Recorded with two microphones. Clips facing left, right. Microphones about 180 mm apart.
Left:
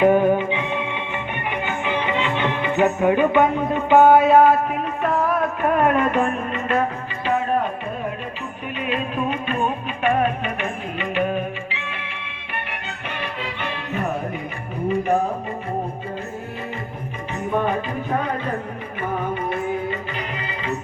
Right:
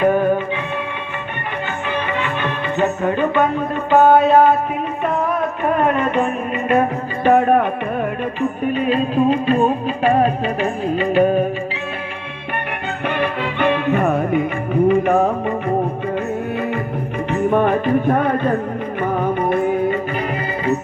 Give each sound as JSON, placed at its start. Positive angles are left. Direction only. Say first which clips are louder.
{"t": 0.0, "sound": "music", "louder": "even", "side_deg": 15}
{"t": 1.9, "sound": "music", "louder": "even", "side_deg": 20}
{"t": 4.0, "sound": "music", "louder": "right 2 dB", "side_deg": 5}
{"t": 5.6, "sound": "music", "louder": "right 1 dB", "side_deg": 0}
{"t": 7.3, "sound": "music", "louder": "right 8 dB", "side_deg": -60}
{"t": 8.4, "sound": "music", "louder": "right 11 dB", "side_deg": -40}
{"t": 13.1, "sound": "music", "louder": "right 9 dB", "side_deg": -60}
{"t": 17.5, "sound": "music", "louder": "right 6 dB", "side_deg": -60}